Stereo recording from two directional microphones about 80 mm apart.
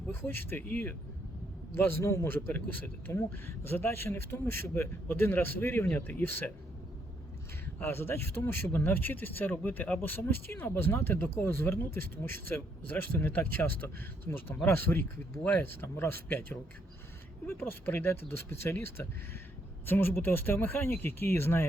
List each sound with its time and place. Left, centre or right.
0.1 s a man's voice: left
2.2 s speech: left
7.8 s speech: left